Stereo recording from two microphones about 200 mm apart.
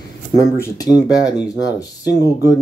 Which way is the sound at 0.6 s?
15° left (ahead or behind).